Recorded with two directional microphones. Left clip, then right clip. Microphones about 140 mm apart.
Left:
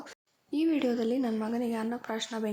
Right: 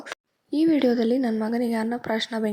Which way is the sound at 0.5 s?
35° right (ahead or behind).